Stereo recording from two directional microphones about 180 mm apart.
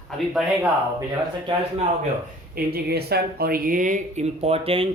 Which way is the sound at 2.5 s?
60° right (ahead or behind).